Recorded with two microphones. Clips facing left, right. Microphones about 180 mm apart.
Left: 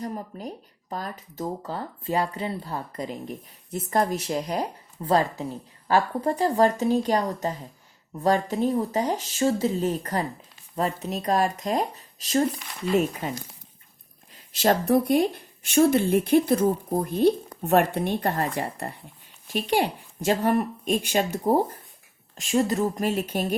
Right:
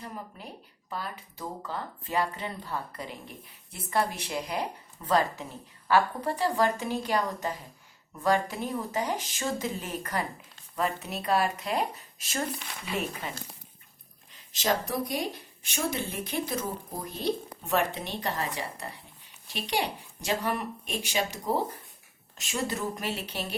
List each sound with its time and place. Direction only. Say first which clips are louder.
0.0 s speech: left 8 dB; 40° left (ahead or behind)
14.6 s speech: left 8 dB; 50° left (ahead or behind)